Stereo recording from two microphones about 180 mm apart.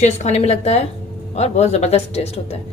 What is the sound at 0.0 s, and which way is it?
Speech, 35° left (ahead or behind).